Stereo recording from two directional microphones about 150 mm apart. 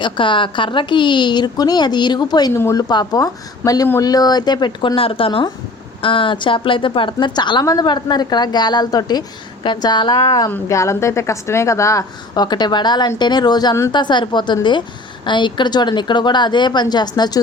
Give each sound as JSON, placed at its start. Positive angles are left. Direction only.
{"t": 0.0, "sound": "a woman's voice", "side_deg": 35}
{"t": 2.5, "sound": "a woman's voice", "side_deg": 15}